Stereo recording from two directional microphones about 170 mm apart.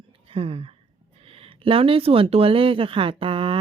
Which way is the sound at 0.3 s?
35° right (ahead or behind).